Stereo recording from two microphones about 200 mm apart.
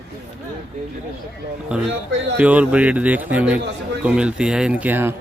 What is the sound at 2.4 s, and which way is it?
Speech, 5° right (ahead or behind).